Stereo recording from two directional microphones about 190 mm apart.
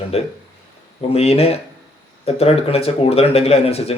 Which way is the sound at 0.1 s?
35° left (ahead or behind).